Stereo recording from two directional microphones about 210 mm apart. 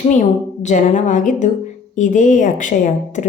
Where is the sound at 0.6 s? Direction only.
35° left (ahead or behind).